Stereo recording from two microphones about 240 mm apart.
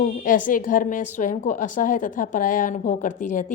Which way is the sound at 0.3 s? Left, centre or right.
Left.